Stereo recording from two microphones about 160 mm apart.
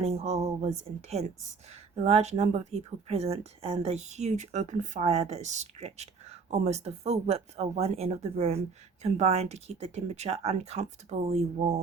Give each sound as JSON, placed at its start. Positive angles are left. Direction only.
{"t": 0.0, "sound": "speech", "side_deg": -40}